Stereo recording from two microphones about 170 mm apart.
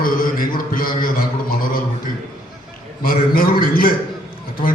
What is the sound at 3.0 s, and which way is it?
Speech, 55° left (ahead or behind).